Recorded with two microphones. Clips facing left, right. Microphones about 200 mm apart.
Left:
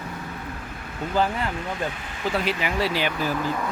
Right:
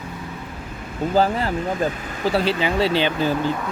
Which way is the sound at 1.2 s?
35° right (ahead or behind).